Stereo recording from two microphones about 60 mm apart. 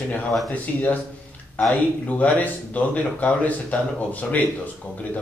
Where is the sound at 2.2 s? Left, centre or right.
Left.